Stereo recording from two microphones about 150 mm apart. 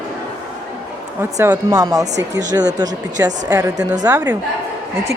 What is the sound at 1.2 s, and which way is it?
A woman's voice, 20° right (ahead or behind).